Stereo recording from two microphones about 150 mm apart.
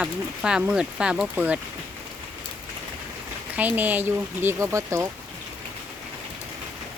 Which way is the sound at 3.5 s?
10° right (ahead or behind).